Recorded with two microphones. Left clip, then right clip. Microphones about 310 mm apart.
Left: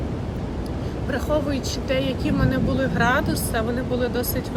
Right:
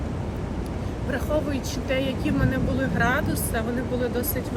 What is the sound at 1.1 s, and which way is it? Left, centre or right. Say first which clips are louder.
Speech: left 3 dB; centre.